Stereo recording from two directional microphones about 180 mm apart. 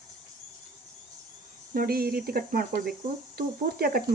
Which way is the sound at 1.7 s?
55° right (ahead or behind).